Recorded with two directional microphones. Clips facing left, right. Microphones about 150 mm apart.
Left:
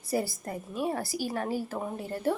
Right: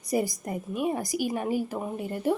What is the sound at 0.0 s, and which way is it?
A woman's voice, 15° right (ahead or behind).